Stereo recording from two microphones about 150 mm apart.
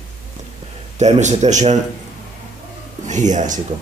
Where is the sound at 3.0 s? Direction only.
55° right (ahead or behind).